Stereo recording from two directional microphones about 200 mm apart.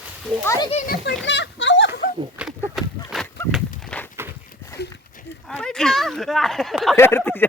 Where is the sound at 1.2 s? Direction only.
65° left (ahead or behind).